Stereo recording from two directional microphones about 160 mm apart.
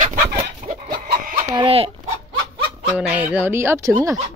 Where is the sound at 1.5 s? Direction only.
35° right (ahead or behind).